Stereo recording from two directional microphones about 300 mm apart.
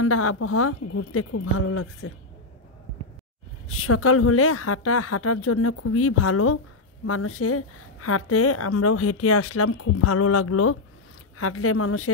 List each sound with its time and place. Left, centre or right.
0.0 s a woman's voice: left
3.6 s a woman's voice: left